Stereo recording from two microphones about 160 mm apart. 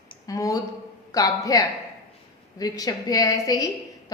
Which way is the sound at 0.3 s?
20° left (ahead or behind).